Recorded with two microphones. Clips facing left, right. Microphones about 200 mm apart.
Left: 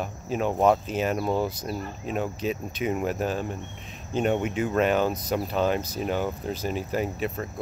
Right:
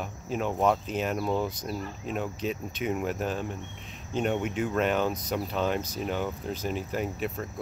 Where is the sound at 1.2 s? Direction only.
35° left (ahead or behind).